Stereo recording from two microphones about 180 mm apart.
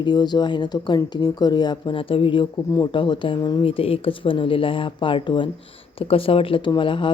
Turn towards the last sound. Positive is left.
turn(degrees=30)  # may be behind; listen again after turning